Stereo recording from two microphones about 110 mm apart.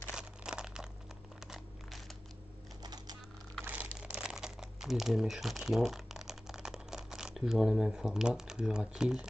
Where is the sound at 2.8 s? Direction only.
40° right (ahead or behind).